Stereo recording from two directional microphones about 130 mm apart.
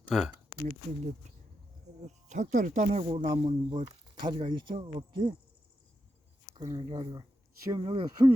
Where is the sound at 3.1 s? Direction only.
40° right (ahead or behind).